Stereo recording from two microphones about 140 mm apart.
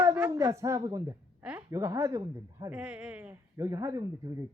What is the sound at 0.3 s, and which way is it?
Speech, 25° right (ahead or behind).